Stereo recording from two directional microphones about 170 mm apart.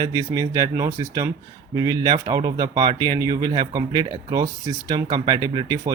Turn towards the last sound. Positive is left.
turn(degrees=-20)  # may be behind; listen again after turning